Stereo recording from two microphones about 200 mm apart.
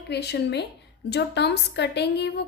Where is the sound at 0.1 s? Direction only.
55° left (ahead or behind).